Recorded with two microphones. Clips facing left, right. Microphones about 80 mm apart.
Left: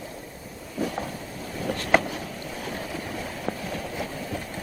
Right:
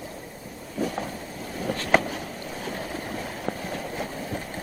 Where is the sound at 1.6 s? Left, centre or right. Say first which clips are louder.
Even; right.